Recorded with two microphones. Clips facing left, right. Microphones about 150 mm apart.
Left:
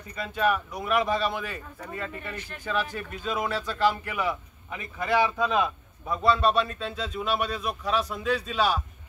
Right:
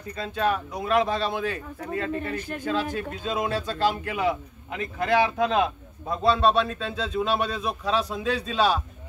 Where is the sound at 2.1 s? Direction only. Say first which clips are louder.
Right 8 dB; 45° right (ahead or behind).